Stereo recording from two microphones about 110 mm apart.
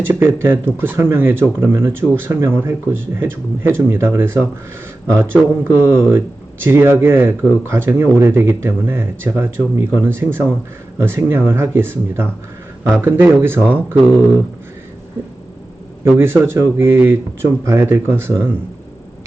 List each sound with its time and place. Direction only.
0.0 s speech: 20° right (ahead or behind)
16.1 s speech: 20° right (ahead or behind)